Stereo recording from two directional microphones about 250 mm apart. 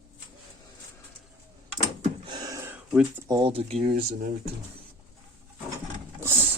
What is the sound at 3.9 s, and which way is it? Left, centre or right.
Speech, right.